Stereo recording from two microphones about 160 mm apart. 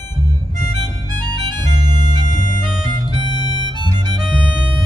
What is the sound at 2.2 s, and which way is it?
Organ, 50° right (ahead or behind).